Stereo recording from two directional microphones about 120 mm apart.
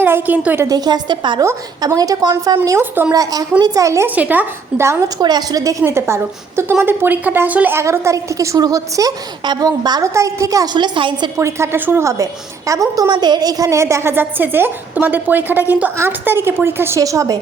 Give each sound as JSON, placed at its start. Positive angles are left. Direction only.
{"t": 0.0, "sound": "a woman's voice", "side_deg": -15}
{"t": 0.7, "sound": "a woman's voice", "side_deg": -35}
{"t": 1.4, "sound": "a woman's voice", "side_deg": -25}
{"t": 2.6, "sound": "a woman's voice", "side_deg": -20}
{"t": 3.1, "sound": "a woman's voice", "side_deg": -30}
{"t": 4.1, "sound": "a woman's voice", "side_deg": -15}
{"t": 11.3, "sound": "a woman's voice", "side_deg": -25}